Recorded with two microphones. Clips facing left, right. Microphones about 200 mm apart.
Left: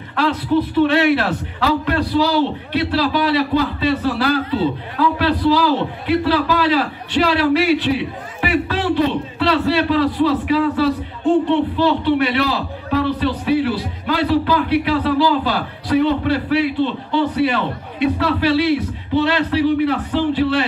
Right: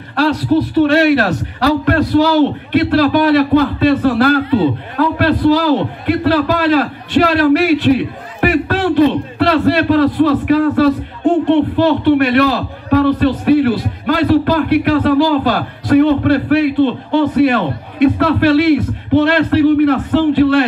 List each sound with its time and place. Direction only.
0.7 s a man's voice: 45° right (ahead or behind)